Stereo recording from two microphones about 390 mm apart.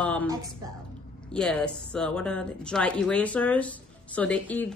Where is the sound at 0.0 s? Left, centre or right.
Centre.